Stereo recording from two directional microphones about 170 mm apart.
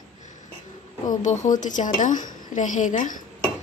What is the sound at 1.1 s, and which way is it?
A woman's voice, 45° left (ahead or behind).